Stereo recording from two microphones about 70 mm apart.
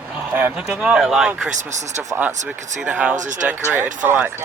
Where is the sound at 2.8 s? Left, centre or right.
Right.